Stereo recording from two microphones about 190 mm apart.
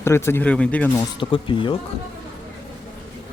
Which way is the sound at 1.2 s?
25° left (ahead or behind).